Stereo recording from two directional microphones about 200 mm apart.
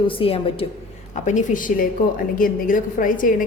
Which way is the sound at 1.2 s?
40° left (ahead or behind).